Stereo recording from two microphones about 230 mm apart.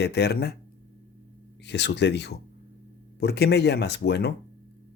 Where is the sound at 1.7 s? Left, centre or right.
Left.